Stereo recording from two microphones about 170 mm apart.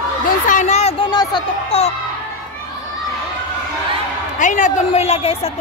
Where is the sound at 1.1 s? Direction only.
25° left (ahead or behind).